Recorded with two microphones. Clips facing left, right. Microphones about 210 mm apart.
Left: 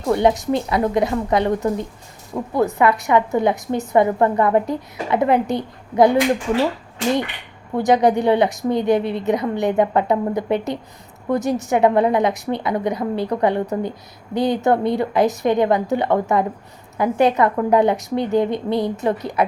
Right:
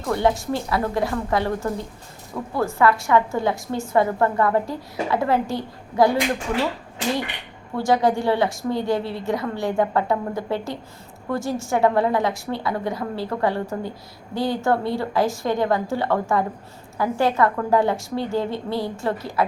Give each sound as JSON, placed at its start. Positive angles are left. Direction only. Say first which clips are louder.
{"t": 0.0, "sound": "a woman's voice", "louder": "left 4 dB", "side_deg": 20}
{"t": 7.8, "sound": "a woman's voice", "louder": "left 4 dB", "side_deg": 20}